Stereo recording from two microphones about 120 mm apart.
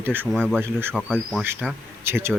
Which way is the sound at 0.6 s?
20° right (ahead or behind).